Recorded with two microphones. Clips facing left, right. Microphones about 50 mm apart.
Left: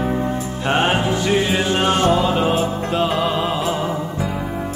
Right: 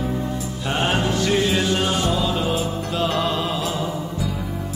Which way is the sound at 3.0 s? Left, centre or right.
Centre.